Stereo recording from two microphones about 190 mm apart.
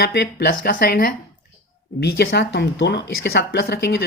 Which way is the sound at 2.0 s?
65° left (ahead or behind).